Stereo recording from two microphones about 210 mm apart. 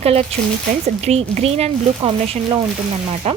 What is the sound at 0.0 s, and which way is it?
Speech, 30° right (ahead or behind).